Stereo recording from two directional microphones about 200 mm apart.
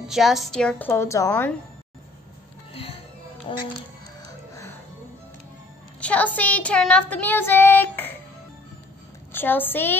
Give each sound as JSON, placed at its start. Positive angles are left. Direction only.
{"t": 0.1, "sound": "speech", "side_deg": 0}
{"t": 2.7, "sound": "music", "side_deg": 30}
{"t": 3.5, "sound": "speech", "side_deg": 25}
{"t": 5.9, "sound": "speech", "side_deg": 5}
{"t": 9.3, "sound": "speech", "side_deg": 10}